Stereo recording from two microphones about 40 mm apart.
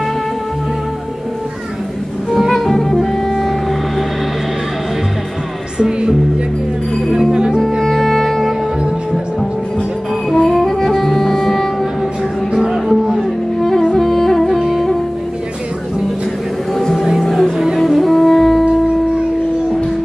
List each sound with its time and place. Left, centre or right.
2.3 s music: centre
5.8 s music: centre
7.8 s music: centre
10.3 s music: centre
12.5 s music: centre
13.6 s music: centre
14.5 s music: centre
16.7 s vehicle: centre
17.2 s music: centre